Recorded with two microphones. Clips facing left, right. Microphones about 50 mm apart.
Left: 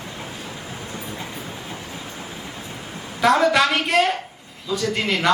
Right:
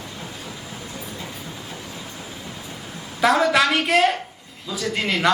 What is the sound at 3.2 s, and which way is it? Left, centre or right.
A woman's voice, centre.